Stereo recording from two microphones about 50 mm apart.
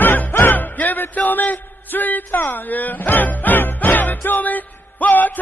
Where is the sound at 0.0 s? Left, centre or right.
Left.